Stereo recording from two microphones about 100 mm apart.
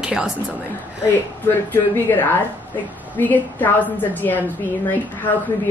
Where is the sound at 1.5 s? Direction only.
20° left (ahead or behind).